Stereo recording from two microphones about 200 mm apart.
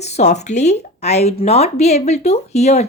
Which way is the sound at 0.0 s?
35° left (ahead or behind).